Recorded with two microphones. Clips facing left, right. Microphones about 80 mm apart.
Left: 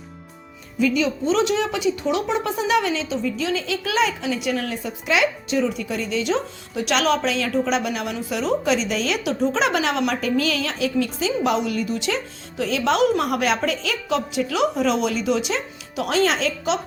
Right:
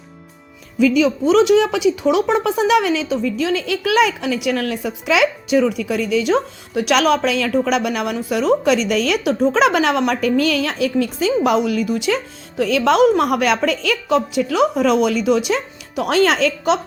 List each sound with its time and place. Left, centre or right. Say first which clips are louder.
0.8 s a woman's voice: right 6 dB; right
9.4 s a woman's voice: right 6 dB; right